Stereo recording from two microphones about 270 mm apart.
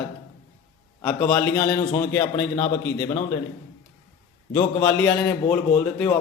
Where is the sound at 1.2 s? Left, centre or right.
Centre.